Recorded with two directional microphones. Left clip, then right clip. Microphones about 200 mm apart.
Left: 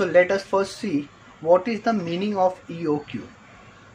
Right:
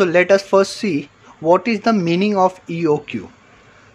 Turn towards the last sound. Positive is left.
turn(degrees=-45)  # may be behind; listen again after turning